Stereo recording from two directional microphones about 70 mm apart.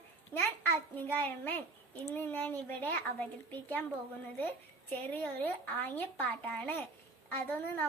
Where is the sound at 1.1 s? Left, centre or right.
Left.